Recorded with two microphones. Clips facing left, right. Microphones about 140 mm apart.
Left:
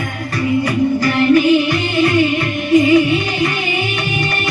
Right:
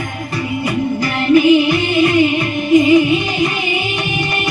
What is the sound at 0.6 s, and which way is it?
Music, 15° right (ahead or behind).